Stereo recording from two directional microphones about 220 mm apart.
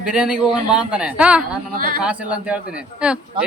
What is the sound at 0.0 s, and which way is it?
Speech, 5° right (ahead or behind).